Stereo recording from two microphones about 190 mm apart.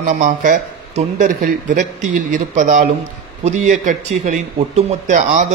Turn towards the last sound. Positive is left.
turn(degrees=-40)  # may be behind; listen again after turning